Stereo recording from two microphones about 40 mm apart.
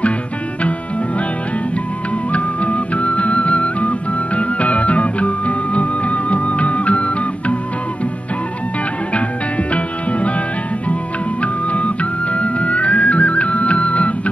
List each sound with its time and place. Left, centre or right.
2.3 s music: left
9.7 s music: left
11.4 s music: left